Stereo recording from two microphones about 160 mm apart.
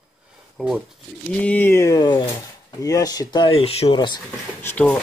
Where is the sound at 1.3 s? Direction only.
10° left (ahead or behind); by 4.0 s 40° left (ahead or behind).